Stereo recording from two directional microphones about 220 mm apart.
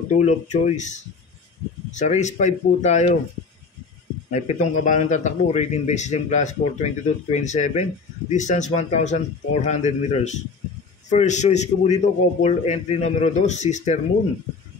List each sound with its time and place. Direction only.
0.1 s a man's voice: 30° left (ahead or behind)
4.3 s a man's voice: 30° left (ahead or behind)